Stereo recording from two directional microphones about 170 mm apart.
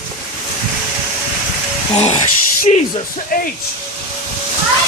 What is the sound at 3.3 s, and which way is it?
Speech, 55° left (ahead or behind).